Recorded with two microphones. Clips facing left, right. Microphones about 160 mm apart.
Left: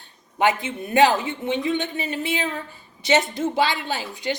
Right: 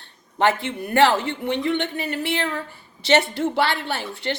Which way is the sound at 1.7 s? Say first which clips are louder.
Right 1 dB; 65° right (ahead or behind).